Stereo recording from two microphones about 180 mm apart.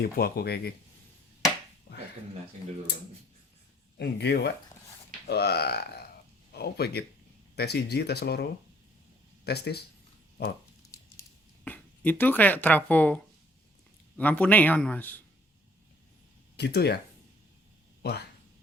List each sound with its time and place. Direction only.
0.0 s speech: 60° left (ahead or behind)
3.9 s speech: 70° left (ahead or behind)
10.9 s a sound: 10° left (ahead or behind)
14.2 s a man's voice: 10° left (ahead or behind)
16.6 s speech: 65° left (ahead or behind)
18.0 s speech: 65° left (ahead or behind)